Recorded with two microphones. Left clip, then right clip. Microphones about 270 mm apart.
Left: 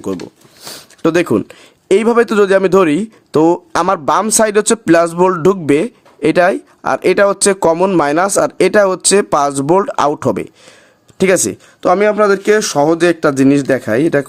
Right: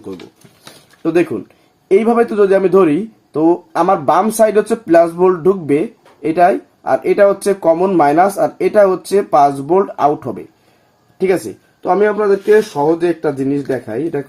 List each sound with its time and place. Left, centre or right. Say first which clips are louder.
1.0 s speech: left 3 dB; left
11.8 s speech: left 3 dB; left